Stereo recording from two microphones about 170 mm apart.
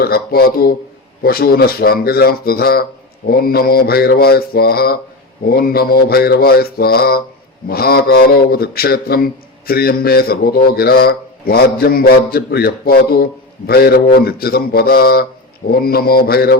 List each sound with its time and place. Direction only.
0.0 s a man's voice: 65° left (ahead or behind)